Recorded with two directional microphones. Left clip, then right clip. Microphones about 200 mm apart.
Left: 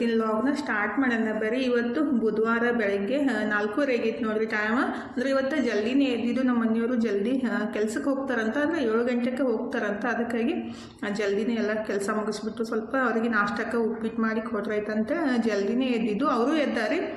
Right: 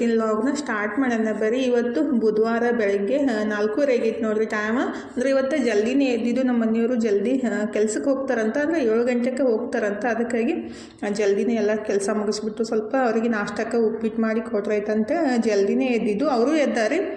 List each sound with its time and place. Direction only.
0.0 s a woman's voice: 20° right (ahead or behind)